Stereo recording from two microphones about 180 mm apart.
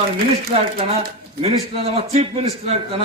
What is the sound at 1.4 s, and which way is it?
A man's voice, 35° right (ahead or behind).